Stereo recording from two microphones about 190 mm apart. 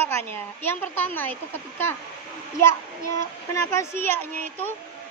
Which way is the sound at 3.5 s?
15° left (ahead or behind).